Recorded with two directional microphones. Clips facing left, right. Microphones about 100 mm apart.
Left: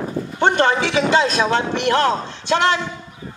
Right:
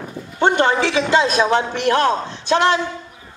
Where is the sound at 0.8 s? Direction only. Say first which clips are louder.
Even; 20° left (ahead or behind).